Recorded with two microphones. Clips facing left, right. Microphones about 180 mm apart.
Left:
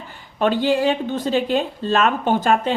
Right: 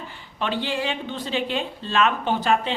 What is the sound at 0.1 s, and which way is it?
A woman's voice, 45° left (ahead or behind).